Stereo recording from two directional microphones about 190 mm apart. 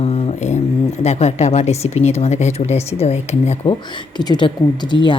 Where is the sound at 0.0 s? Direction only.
35° left (ahead or behind).